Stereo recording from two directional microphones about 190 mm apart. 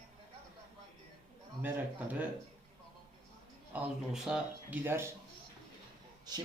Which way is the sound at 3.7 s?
5° right (ahead or behind).